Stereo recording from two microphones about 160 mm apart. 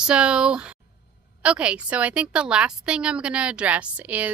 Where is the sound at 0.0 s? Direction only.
5° right (ahead or behind).